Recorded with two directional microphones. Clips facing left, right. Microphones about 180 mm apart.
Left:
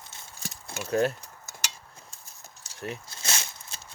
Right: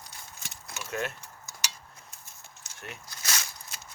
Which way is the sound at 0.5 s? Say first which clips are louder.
Left 8 dB; 35° left (ahead or behind).